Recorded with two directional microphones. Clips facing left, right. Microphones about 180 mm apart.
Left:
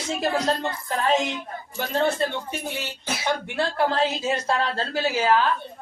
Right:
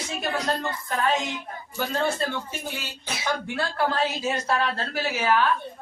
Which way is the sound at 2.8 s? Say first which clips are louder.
Left 3 dB; 25° left (ahead or behind).